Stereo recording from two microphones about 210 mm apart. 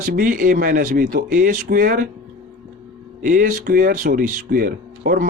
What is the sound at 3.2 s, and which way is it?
Speech, 40° right (ahead or behind).